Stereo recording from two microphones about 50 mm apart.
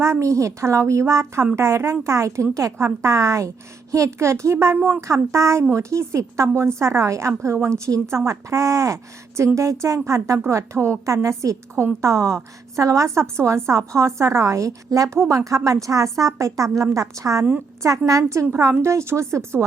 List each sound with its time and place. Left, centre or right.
0.0 s a woman's voice: right
2.7 s a woman's voice: right
4.9 s a woman's voice: right
5.7 s a woman's voice: right
10.5 s a woman's voice: right
11.0 s a woman's voice: right
18.7 s speech: right